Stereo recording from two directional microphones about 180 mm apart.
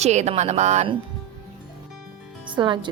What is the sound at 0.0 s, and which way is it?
Speech, 40° right (ahead or behind).